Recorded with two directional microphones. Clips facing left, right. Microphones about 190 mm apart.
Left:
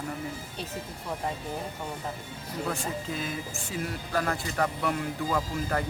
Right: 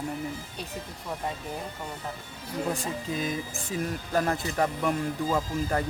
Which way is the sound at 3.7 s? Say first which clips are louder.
Right 3 dB; 20° right (ahead or behind).